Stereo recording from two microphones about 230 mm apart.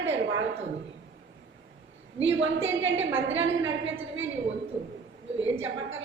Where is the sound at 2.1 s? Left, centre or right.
Right.